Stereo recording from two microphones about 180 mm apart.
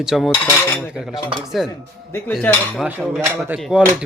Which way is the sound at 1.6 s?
Centre (ahead or behind).